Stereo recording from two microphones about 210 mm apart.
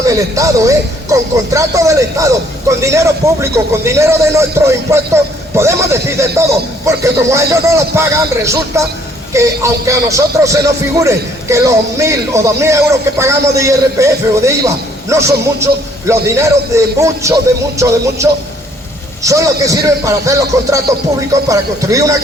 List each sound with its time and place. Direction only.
0.0 s speech: 15° right (ahead or behind)